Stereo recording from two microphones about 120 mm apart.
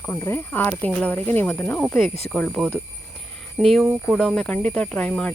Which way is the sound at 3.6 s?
Centre (ahead or behind).